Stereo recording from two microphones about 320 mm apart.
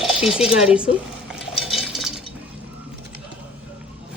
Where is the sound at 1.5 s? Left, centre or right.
Centre.